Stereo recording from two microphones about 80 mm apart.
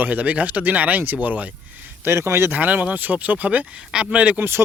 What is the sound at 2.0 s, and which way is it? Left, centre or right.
Speech, right.